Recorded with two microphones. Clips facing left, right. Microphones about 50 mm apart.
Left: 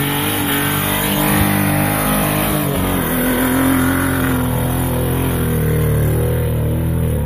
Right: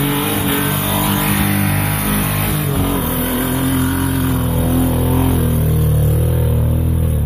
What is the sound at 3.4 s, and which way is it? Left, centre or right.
Vehicle, left.